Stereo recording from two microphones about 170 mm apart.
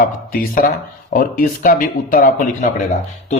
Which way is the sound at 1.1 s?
55° left (ahead or behind).